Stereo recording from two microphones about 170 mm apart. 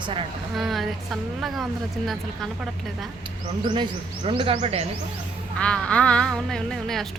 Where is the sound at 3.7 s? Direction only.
30° right (ahead or behind).